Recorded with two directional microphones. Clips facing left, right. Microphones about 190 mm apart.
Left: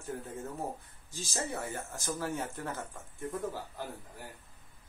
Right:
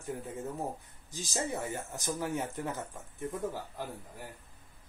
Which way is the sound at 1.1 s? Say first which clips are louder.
Right 2 dB; 15° right (ahead or behind).